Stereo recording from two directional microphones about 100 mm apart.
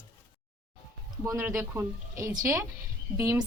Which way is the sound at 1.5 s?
25° right (ahead or behind).